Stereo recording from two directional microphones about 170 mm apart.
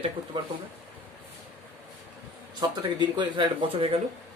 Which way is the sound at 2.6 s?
25° right (ahead or behind).